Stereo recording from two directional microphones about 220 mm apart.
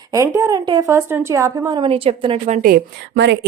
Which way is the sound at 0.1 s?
15° right (ahead or behind).